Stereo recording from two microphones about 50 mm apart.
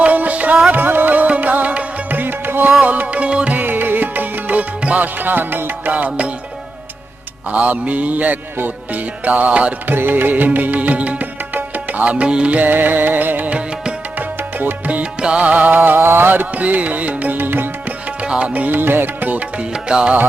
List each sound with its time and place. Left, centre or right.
0.0 s music: right
5.1 s music: right
7.5 s mantra: right
8.5 s music: right
9.8 s music: right
12.5 s music: right
15.2 s music: right
18.2 s music: right
19.3 s mantra: right
19.7 s music: centre